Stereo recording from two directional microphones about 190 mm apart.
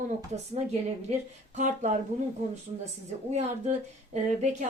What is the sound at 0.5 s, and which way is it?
Speech, 35° right (ahead or behind).